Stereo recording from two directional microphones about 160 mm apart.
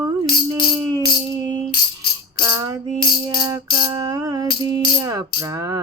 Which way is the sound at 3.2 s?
25° right (ahead or behind).